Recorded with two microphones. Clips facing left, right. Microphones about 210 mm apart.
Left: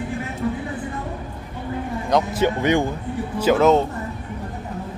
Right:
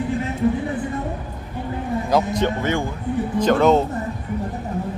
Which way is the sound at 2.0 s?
5° right (ahead or behind).